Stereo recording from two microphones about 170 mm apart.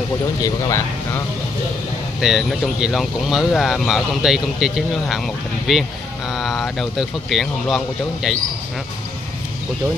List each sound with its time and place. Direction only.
0.4 s speech: 15° left (ahead or behind)
2.2 s speech: centre (ahead or behind)